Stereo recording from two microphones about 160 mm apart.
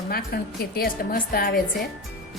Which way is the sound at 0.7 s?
70° left (ahead or behind).